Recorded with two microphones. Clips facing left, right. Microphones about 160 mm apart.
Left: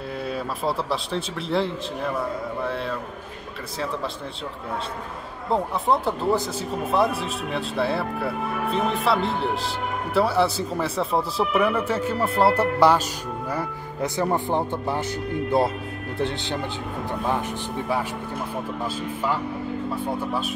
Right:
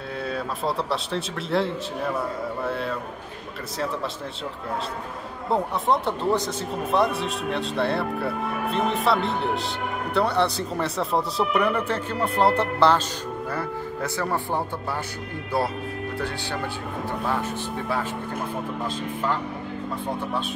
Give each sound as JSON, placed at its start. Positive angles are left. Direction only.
{"t": 0.3, "sound": "speech", "side_deg": 0}
{"t": 5.5, "sound": "speech", "side_deg": 0}
{"t": 17.3, "sound": "speech", "side_deg": 15}